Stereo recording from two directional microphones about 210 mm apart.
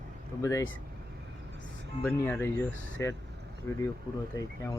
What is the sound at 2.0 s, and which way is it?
Speech, 5° left (ahead or behind).